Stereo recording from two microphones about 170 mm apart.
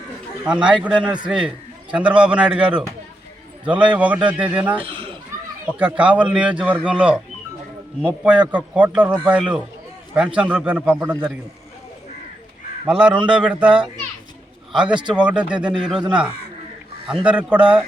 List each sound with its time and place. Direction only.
0.4 s a man's voice: 5° right (ahead or behind)
4.7 s speech: 30° right (ahead or behind)
5.6 s a man's voice: 10° right (ahead or behind)
12.9 s a man's voice: 5° right (ahead or behind)
15.1 s a man's voice: 5° right (ahead or behind)